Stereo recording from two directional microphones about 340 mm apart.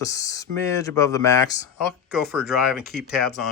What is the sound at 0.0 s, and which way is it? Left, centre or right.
Speech, centre.